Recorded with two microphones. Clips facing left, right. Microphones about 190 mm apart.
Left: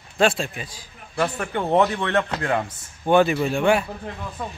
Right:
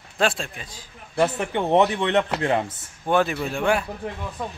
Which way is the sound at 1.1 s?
20° right (ahead or behind).